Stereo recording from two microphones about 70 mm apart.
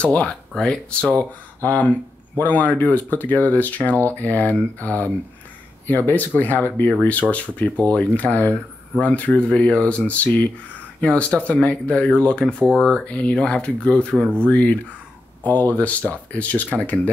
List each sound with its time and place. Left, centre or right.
0.0 s speech: centre
1.1 s speech: left; by 13.0 s centre
13.0 s speech: centre